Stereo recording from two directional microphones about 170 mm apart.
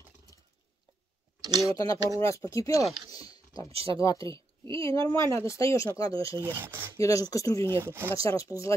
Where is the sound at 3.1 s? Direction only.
20° left (ahead or behind).